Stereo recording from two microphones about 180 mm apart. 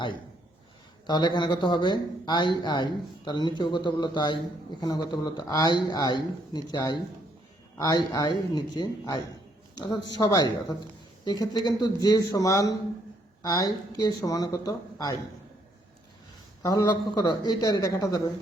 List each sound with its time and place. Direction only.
1.0 s speech: 25° left (ahead or behind)
16.6 s speech: 20° left (ahead or behind)